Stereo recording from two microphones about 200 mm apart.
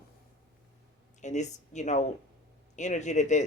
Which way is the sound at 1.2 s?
35° left (ahead or behind).